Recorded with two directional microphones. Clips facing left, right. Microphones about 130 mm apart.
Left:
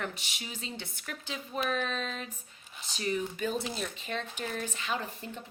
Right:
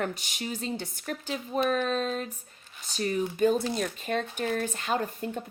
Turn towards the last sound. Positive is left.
turn(degrees=-50)  # may be behind; listen again after turning